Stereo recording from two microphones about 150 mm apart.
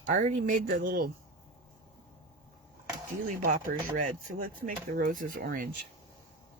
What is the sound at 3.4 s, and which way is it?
Speech, 60° right (ahead or behind).